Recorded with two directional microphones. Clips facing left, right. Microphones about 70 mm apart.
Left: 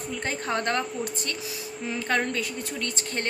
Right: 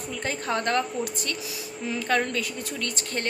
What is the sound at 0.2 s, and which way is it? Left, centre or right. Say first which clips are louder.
A woman's voice: right 1 dB; left.